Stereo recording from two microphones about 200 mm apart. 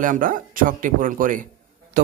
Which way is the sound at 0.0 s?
40° right (ahead or behind).